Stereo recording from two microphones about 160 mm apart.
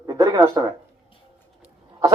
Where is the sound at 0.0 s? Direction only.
20° right (ahead or behind).